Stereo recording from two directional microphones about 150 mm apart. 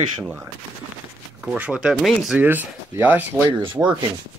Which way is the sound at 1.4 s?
10° right (ahead or behind).